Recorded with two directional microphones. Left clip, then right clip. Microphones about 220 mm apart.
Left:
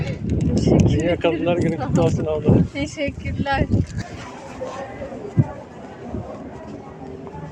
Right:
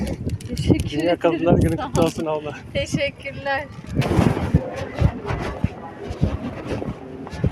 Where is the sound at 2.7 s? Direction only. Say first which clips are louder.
Right 2 dB; 50° right (ahead or behind).